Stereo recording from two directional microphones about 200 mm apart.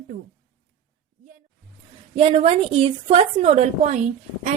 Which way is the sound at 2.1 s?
30° right (ahead or behind).